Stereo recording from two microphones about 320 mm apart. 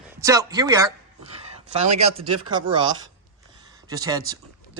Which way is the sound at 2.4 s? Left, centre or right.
Centre.